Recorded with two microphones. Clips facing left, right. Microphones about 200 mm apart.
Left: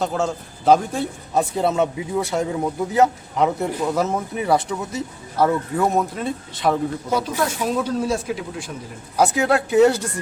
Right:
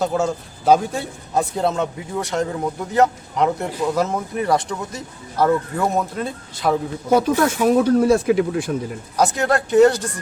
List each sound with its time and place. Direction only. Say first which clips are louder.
0.0 s speech: right 2 dB; centre (ahead or behind)
7.1 s speech: right 8 dB; 55° right (ahead or behind)
9.1 s speech: left 1 dB; 5° left (ahead or behind)